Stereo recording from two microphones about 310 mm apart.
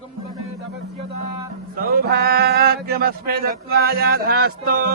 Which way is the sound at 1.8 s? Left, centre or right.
Right.